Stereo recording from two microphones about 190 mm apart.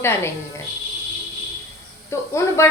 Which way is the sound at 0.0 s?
15° left (ahead or behind).